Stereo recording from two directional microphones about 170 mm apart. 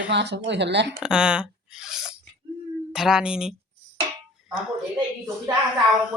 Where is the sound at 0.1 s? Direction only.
90° right.